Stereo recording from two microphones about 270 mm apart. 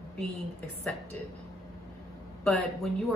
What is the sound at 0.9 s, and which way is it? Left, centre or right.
Speech, centre.